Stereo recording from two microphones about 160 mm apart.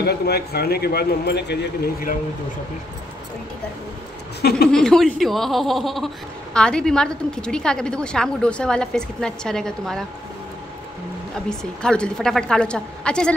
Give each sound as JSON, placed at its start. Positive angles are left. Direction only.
{"t": 0.0, "sound": "a man's voice", "side_deg": 80}
{"t": 4.4, "sound": "a man's voice", "side_deg": 85}
{"t": 4.6, "sound": "speech", "side_deg": 5}
{"t": 11.8, "sound": "speech", "side_deg": 5}